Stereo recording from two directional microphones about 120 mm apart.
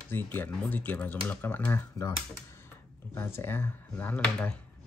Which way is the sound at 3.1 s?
20° left (ahead or behind).